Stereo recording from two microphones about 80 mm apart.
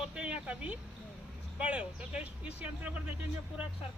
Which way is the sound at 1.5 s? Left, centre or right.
Centre.